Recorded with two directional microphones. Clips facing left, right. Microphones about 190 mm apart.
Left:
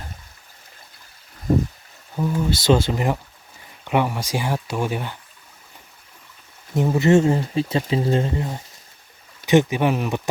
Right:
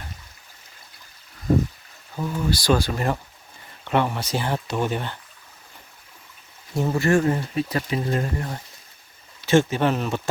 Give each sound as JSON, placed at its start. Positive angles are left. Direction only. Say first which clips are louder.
{"t": 2.1, "sound": "speech", "louder": "left 4 dB", "side_deg": 10}
{"t": 2.5, "sound": "speech", "louder": "left 2 dB", "side_deg": 25}
{"t": 6.7, "sound": "speech", "louder": "left 4 dB", "side_deg": 20}